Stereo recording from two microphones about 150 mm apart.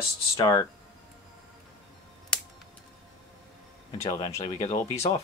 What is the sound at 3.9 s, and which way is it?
Speech, 30° left (ahead or behind).